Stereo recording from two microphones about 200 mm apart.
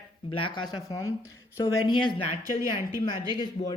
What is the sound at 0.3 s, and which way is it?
Speech, 25° left (ahead or behind).